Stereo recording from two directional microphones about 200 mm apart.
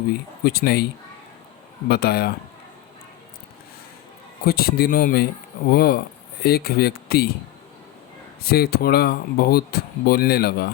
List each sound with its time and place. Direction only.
0.1 s speech: 50° left (ahead or behind)
1.9 s speech: 50° left (ahead or behind)
4.4 s speech: 50° left (ahead or behind)
8.4 s speech: 50° left (ahead or behind)